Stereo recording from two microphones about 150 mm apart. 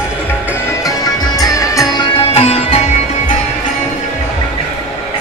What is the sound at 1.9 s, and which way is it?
Sitar, 35° left (ahead or behind).